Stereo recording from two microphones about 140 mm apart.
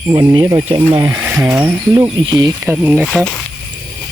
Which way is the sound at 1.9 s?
25° right (ahead or behind).